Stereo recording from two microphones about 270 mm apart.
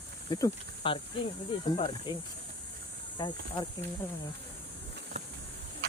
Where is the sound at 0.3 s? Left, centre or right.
Centre.